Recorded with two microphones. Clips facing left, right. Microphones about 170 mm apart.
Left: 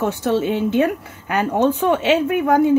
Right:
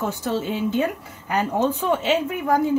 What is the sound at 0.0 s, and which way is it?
A woman's voice, 70° left (ahead or behind).